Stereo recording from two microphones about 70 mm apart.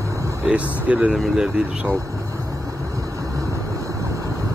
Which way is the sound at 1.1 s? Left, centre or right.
Centre.